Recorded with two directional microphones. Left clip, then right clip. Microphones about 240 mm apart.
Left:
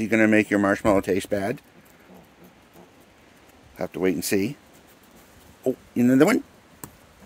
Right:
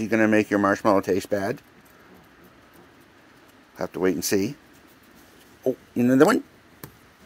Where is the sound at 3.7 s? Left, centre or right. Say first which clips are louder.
Even; centre.